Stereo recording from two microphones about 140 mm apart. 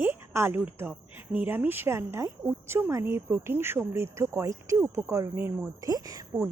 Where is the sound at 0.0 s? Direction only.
15° right (ahead or behind).